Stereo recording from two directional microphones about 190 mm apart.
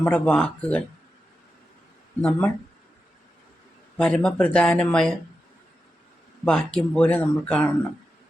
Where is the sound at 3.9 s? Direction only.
5° left (ahead or behind).